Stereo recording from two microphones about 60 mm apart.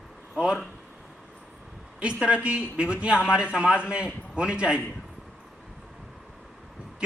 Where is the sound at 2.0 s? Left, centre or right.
Centre.